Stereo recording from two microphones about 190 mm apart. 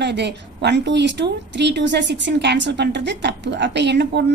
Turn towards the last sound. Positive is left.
turn(degrees=-65)  # may be behind; listen again after turning